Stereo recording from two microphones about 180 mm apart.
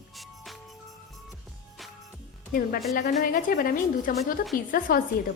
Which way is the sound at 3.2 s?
50° left (ahead or behind).